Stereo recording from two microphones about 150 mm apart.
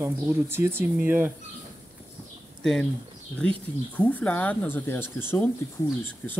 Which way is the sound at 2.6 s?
5° left (ahead or behind).